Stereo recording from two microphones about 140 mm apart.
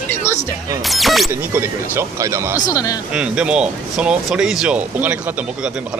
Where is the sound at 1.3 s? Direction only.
15° right (ahead or behind).